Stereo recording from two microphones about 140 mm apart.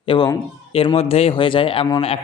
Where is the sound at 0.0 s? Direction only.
40° left (ahead or behind).